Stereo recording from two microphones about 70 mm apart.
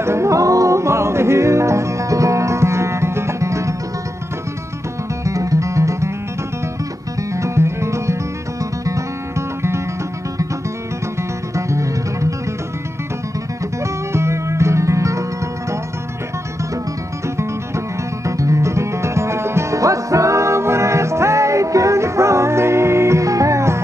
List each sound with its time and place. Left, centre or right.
0.0 s music: right
5.2 s music: right
7.3 s music: right
11.5 s music: right
14.1 s music: right
17.4 s music: right